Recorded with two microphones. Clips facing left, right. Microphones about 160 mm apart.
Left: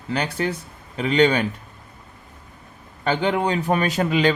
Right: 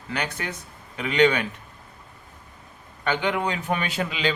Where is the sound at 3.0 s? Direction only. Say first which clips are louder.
Left 4 dB; 35° left (ahead or behind).